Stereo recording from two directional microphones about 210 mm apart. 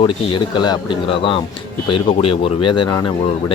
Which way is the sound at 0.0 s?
25° left (ahead or behind).